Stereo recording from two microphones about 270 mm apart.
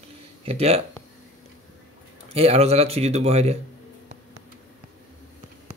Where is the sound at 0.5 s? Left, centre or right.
Right.